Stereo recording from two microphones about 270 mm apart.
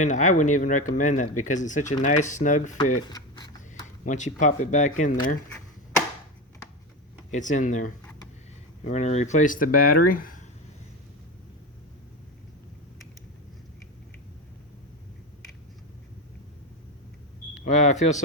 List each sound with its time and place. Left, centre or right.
0.0 s speech: left
3.1 s a sound: centre
4.0 s speech: left
7.3 s speech: left
17.5 s speech: left